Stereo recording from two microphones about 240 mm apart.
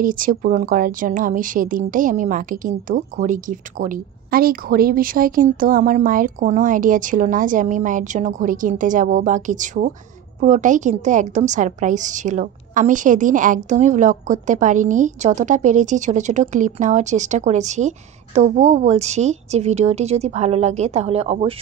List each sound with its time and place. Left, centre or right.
0.0 s a woman's voice: right